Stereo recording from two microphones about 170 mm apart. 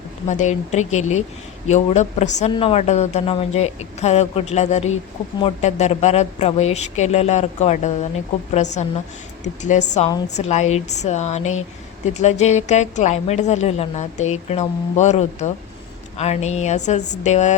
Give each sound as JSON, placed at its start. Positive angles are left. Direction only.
{"t": 0.3, "sound": "a woman's voice", "side_deg": 45}